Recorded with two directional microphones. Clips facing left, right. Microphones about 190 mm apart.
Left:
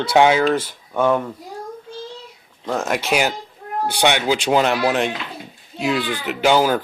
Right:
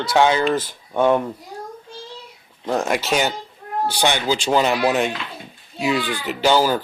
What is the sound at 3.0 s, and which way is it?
Speech, 5° left (ahead or behind).